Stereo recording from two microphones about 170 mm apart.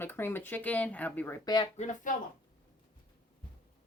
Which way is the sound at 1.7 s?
45° left (ahead or behind).